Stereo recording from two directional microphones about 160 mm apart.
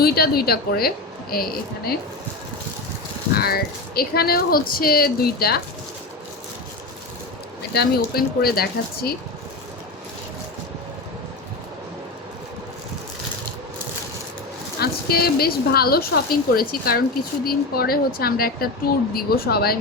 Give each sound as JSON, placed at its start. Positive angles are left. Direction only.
{"t": 0.0, "sound": "speech", "side_deg": 75}
{"t": 3.3, "sound": "speech", "side_deg": 75}
{"t": 7.7, "sound": "speech", "side_deg": 80}
{"t": 14.8, "sound": "speech", "side_deg": 75}